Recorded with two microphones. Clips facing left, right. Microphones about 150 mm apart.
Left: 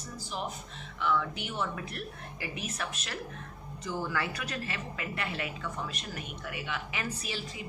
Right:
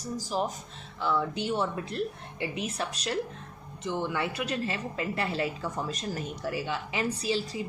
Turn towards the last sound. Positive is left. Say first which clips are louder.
# right 9 dB
turn(degrees=-30)  # may be behind; listen again after turning